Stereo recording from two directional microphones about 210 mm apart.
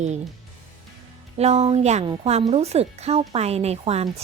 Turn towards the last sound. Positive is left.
turn(degrees=-30)  # may be behind; listen again after turning